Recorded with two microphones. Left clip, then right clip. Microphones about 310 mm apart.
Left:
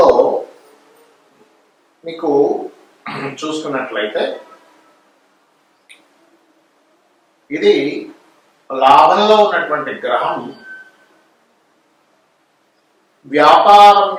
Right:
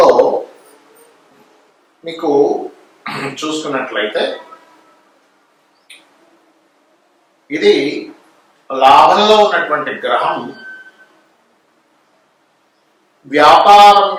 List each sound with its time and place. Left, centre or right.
0.0 s a sound: left
2.1 s a man's voice: centre
3.1 s a man's voice: centre
7.5 s a man's voice: centre
13.4 s a man's voice: centre